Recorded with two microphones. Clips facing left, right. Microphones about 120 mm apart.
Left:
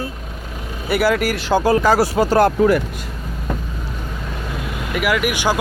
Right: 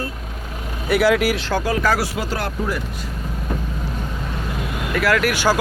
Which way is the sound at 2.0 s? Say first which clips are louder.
Left 10 dB; 45° left (ahead or behind).